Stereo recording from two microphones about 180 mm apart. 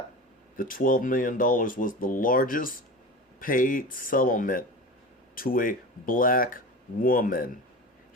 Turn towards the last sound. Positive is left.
turn(degrees=50)  # may be behind; listen again after turning